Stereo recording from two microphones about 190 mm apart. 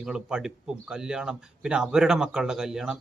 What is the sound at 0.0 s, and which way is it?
Speech, 5° right (ahead or behind).